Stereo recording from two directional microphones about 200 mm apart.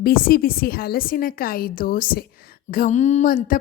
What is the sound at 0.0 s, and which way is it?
A woman's voice, 50° left (ahead or behind).